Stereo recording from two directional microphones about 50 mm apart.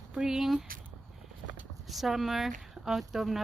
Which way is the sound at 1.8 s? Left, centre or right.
Centre.